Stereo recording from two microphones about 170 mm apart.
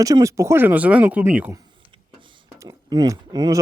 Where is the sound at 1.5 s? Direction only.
25° right (ahead or behind).